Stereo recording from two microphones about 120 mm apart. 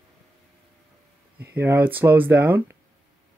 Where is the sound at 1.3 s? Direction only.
15° right (ahead or behind).